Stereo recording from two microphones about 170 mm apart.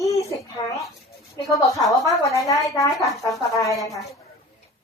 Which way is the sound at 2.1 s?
20° left (ahead or behind).